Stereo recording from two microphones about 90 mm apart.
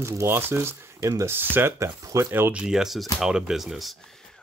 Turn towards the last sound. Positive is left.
turn(degrees=0)  # may be behind; listen again after turning